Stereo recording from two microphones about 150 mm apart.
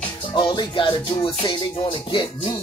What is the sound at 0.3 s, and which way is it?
Music, 30° left (ahead or behind).